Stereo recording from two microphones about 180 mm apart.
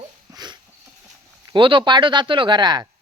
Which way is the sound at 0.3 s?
25° right (ahead or behind).